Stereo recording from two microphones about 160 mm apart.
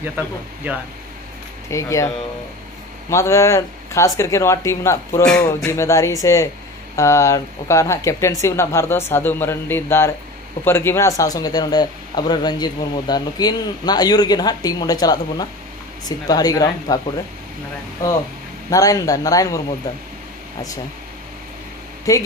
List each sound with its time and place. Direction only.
0.7 s speech: 10° right (ahead or behind)
1.7 s a man's voice: 20° left (ahead or behind)
3.1 s a man's voice: 15° left (ahead or behind)
18.7 s a man's voice: 20° left (ahead or behind)
22.1 s a man's voice: 20° left (ahead or behind)